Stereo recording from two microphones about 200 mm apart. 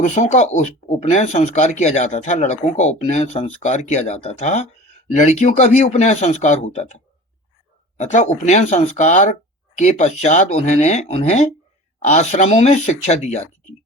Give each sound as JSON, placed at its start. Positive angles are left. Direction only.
{"t": 0.0, "sound": "speech", "side_deg": 35}